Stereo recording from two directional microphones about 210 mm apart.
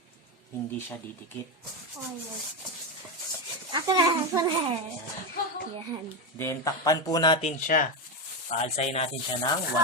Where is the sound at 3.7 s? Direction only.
15° right (ahead or behind).